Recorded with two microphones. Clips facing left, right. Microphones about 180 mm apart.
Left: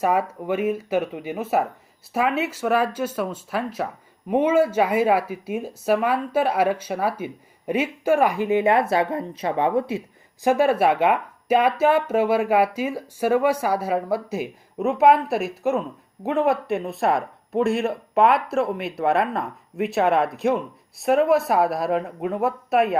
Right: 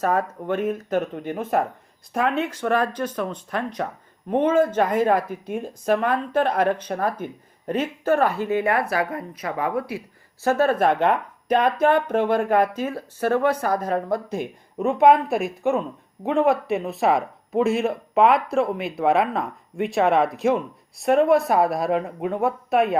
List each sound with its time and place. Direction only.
0.0 s speech: 10° left (ahead or behind)
10.4 s speech: 10° left (ahead or behind)